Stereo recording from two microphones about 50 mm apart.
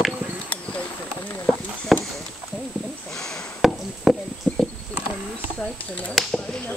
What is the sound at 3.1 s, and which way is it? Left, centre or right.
Speech, centre.